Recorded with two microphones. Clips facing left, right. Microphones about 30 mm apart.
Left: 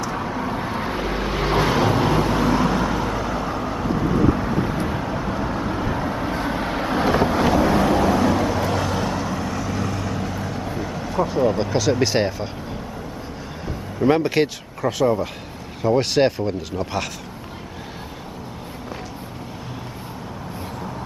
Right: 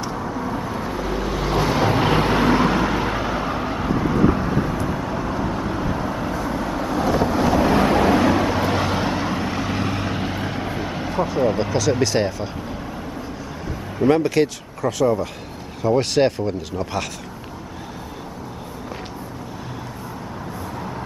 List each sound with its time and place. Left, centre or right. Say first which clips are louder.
0.1 s vehicle: left 1 dB; left
1.8 s vehicle: even; centre
2.0 s vehicle: right 2 dB; right; by 6.3 s centre
6.3 s vehicle: even; left
7.2 s vehicle: even; centre
7.8 s vehicle: right 1 dB; right
11.2 s speech: even; centre
12.0 s speech: even; centre
14.0 s speech: right 1 dB; centre